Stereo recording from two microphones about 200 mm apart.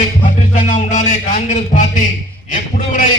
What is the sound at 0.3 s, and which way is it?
Music, 40° left (ahead or behind).